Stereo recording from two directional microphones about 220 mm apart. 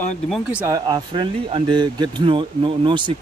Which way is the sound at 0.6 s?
15° right (ahead or behind).